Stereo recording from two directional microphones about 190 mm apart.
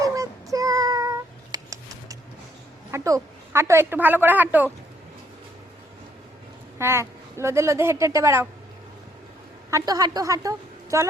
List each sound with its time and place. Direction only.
0.0 s child singing: 15° right (ahead or behind)
2.9 s a woman's voice: 15° right (ahead or behind)
6.7 s a woman's voice: 15° right (ahead or behind)
9.6 s a woman's voice: 20° right (ahead or behind)